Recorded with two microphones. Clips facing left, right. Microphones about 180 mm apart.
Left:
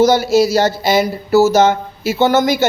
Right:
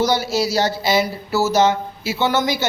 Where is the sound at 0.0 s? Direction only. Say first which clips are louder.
Left 8 dB; 50° left (ahead or behind).